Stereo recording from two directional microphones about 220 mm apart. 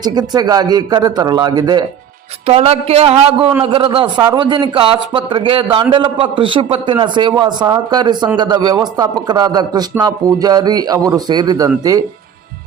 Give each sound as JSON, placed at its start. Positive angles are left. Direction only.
{"t": 0.0, "sound": "a man's voice", "side_deg": -20}